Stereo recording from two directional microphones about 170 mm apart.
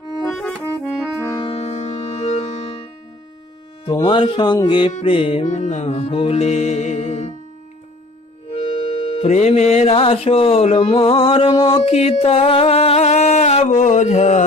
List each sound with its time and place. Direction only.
0.3 s accordion: centre (ahead or behind)
1.2 s music: 20° left (ahead or behind)
1.5 s music: 40° left (ahead or behind)
3.8 s speech: 25° left (ahead or behind)
4.9 s music: 35° left (ahead or behind)
8.5 s music: 40° left (ahead or behind)